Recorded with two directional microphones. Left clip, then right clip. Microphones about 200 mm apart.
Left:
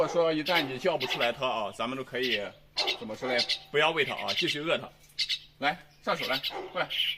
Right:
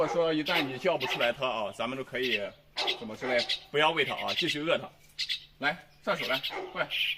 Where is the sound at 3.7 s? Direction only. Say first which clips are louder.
Even; centre (ahead or behind).